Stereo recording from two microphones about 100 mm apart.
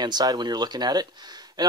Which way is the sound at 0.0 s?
40° right (ahead or behind).